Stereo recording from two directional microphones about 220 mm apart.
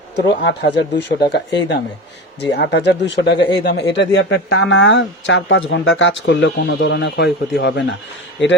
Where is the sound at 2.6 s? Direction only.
50° left (ahead or behind).